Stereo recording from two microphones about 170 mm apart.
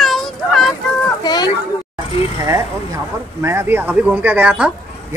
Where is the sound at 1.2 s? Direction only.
25° left (ahead or behind).